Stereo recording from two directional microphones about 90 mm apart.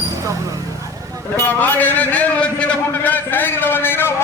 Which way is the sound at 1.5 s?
20° left (ahead or behind).